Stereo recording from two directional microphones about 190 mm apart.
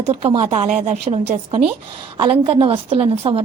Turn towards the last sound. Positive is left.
turn(degrees=-30)  # may be behind; listen again after turning